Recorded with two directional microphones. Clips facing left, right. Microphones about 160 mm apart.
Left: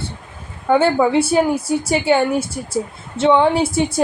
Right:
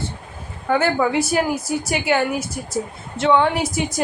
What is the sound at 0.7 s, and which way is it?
A woman's voice, 25° left (ahead or behind).